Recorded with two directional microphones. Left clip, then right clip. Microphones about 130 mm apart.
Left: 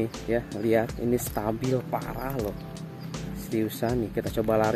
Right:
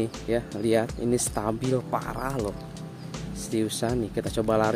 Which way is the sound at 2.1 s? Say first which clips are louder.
Right 2 dB; 30° right (ahead or behind).